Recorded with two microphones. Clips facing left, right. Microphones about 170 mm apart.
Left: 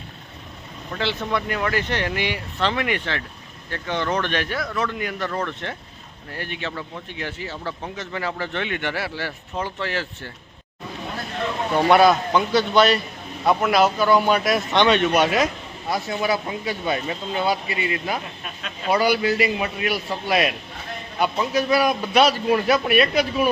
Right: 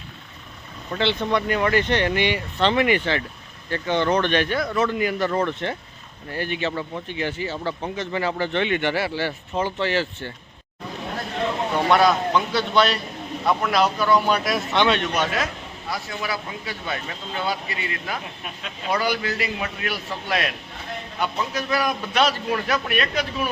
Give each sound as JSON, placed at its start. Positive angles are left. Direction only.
{"t": 0.9, "sound": "speech", "side_deg": 0}
{"t": 11.9, "sound": "speech", "side_deg": 5}
{"t": 15.1, "sound": "speech", "side_deg": 15}